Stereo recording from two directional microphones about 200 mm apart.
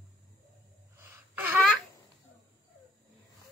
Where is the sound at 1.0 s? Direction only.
10° right (ahead or behind).